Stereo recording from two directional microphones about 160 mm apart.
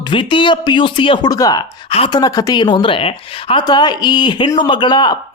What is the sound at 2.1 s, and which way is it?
Speech, 20° left (ahead or behind).